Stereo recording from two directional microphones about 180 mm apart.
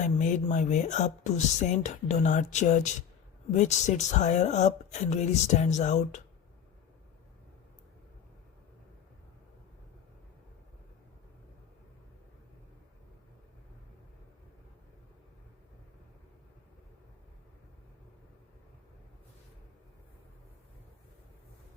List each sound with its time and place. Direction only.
0.0 s speech: 40° left (ahead or behind)